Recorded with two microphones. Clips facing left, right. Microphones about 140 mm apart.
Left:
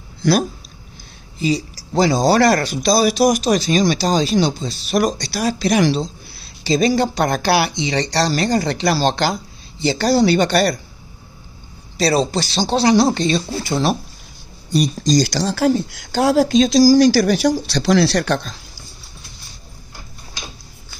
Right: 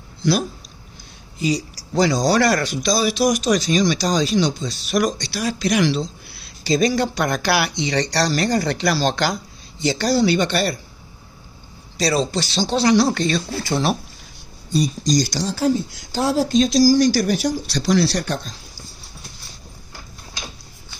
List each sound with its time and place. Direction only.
0.2 s speech: 50° left (ahead or behind)
1.4 s speech: 25° left (ahead or behind)
2.4 s speech: 45° left (ahead or behind)
10.0 s speech: 50° left (ahead or behind)
12.3 s speech: 40° left (ahead or behind)
14.7 s speech: 85° left